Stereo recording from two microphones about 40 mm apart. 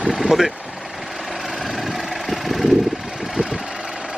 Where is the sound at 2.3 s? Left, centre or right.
Centre.